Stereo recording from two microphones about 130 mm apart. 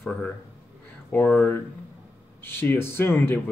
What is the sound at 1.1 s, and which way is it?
Speech, 15° left (ahead or behind).